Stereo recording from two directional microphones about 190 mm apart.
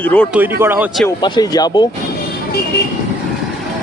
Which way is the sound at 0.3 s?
10° right (ahead or behind).